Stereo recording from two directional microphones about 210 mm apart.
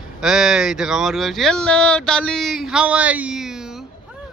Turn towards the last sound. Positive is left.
turn(degrees=-5)  # may be behind; listen again after turning